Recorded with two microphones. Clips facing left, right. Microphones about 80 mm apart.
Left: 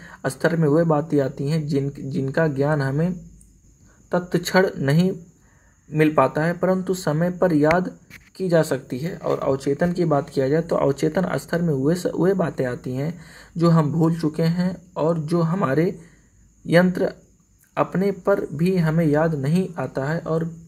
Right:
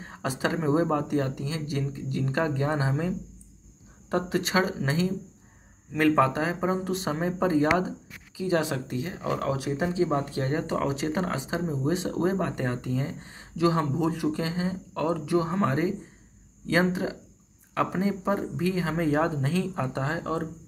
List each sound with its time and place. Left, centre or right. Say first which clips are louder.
0.0 s speech: left 7 dB; left
4.1 s speech: left 5 dB; left
6.3 s speech: left 6 dB; left
15.5 s speech: left 5 dB; left